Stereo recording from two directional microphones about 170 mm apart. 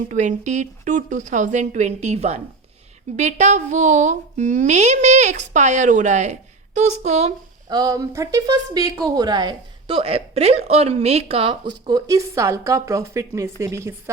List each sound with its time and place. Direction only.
0.1 s a woman's voice: 45° right (ahead or behind)
7.7 s a woman's voice: 20° right (ahead or behind)